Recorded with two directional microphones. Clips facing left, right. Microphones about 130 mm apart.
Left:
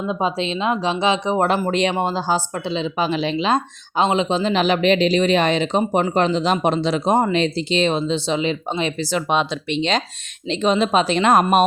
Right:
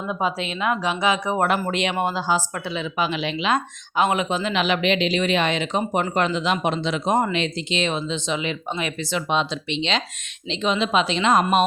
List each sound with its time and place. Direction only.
0.1 s speech: 25° left (ahead or behind)
9.1 s a woman's voice: 55° left (ahead or behind)